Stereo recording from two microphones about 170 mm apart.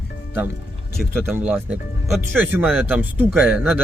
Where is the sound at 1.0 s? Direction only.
Centre (ahead or behind).